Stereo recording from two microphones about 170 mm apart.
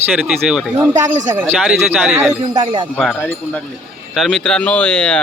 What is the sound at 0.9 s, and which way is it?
Speech, 45° right (ahead or behind).